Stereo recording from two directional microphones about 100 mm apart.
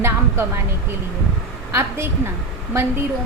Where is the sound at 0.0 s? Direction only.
25° right (ahead or behind).